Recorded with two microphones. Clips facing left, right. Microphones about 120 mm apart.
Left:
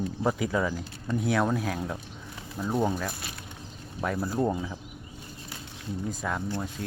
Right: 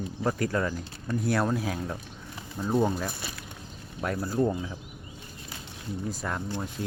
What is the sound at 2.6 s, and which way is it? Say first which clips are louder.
Speech: even; 20° right (ahead or behind).